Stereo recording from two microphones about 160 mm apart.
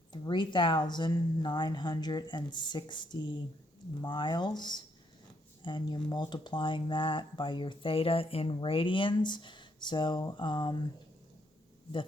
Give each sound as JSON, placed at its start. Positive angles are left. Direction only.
{"t": 0.1, "sound": "speech", "side_deg": 30}